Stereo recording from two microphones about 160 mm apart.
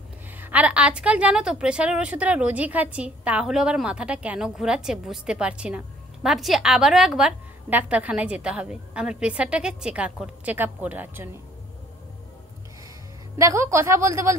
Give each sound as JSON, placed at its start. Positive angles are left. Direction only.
{"t": 0.4, "sound": "a woman's voice", "side_deg": -10}
{"t": 13.4, "sound": "a woman's voice", "side_deg": -20}